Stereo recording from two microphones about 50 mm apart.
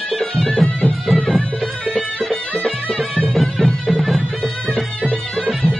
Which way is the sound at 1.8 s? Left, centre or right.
Centre.